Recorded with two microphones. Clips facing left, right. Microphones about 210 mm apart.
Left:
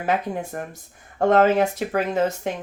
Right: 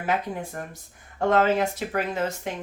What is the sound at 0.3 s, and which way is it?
Speech, 45° left (ahead or behind).